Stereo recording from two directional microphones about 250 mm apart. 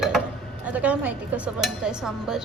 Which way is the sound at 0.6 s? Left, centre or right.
Centre.